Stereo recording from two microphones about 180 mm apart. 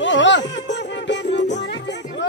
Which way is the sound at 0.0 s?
90° left.